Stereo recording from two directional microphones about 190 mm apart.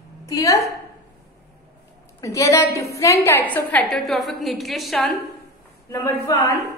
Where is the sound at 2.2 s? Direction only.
15° left (ahead or behind).